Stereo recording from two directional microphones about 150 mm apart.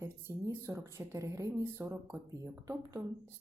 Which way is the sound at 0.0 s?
20° right (ahead or behind).